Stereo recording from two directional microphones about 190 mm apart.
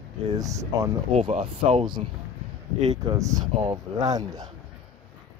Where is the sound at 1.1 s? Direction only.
30° right (ahead or behind).